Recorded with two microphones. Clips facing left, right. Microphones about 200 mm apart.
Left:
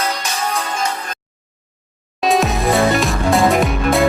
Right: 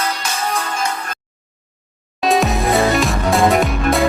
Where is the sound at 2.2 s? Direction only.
Centre (ahead or behind).